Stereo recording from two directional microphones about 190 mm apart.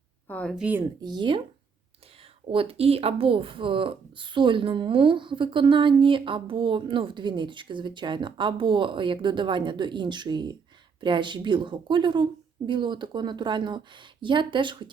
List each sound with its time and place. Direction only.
0.3 s speech: 5° left (ahead or behind)
0.6 s speech: 10° right (ahead or behind)
1.0 s speech: 25° right (ahead or behind)
2.5 s speech: 30° right (ahead or behind)